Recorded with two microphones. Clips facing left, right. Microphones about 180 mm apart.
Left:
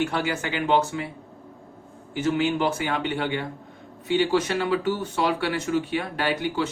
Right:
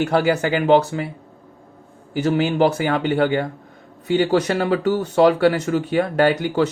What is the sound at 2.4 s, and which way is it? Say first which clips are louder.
Speech: right 6 dB; 35° right (ahead or behind).